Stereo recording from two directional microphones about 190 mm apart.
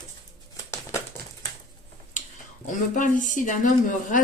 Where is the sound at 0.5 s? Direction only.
15° left (ahead or behind).